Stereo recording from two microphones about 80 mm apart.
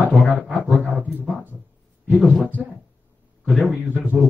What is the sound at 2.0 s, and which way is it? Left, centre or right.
Speech, centre.